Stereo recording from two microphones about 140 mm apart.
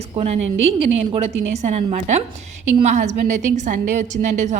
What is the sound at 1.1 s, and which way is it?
A woman's voice, 50° right (ahead or behind).